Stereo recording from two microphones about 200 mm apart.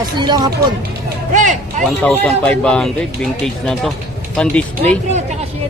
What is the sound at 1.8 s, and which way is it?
Speech, 5° left (ahead or behind).